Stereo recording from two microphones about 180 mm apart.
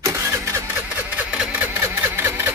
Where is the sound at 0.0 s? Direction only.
15° right (ahead or behind).